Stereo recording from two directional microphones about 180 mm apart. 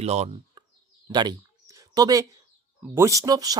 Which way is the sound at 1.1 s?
25° right (ahead or behind).